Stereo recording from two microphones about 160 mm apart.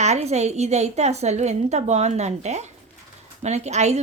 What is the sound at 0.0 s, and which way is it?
Speech, 45° right (ahead or behind).